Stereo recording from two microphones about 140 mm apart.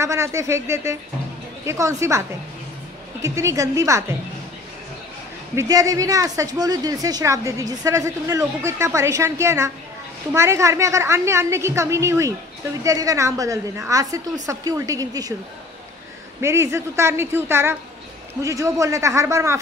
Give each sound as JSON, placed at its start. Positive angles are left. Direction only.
{"t": 0.0, "sound": "a woman's voice", "side_deg": -20}
{"t": 5.6, "sound": "a woman's voice", "side_deg": -25}
{"t": 16.3, "sound": "a woman's voice", "side_deg": -20}